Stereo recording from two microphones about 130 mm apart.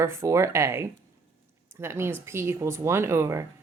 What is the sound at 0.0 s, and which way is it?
Speech, 20° right (ahead or behind).